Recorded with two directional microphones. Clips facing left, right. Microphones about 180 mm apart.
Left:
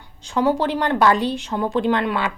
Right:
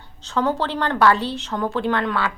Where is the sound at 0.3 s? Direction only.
15° left (ahead or behind).